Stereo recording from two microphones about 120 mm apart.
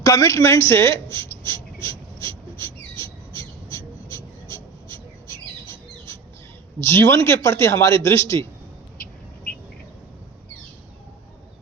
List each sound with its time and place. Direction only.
0.0 s writing: 30° left (ahead or behind)
6.7 s a man's voice: 25° left (ahead or behind)